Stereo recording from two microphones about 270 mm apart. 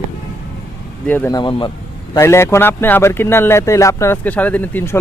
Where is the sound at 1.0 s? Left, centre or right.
Centre.